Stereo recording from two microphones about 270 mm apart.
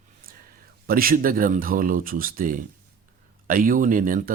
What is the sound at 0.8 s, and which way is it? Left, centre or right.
Speech, right.